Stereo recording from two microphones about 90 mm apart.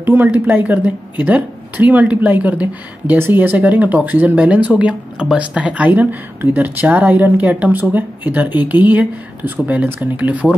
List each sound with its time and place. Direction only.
0.0 s speech: 20° right (ahead or behind)